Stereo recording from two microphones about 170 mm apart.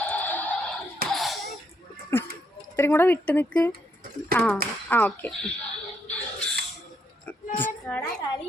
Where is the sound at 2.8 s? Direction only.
15° left (ahead or behind).